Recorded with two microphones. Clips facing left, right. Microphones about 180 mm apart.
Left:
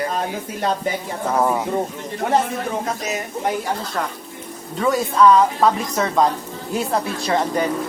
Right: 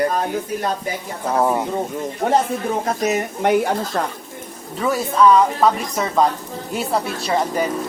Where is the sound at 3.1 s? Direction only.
60° right (ahead or behind).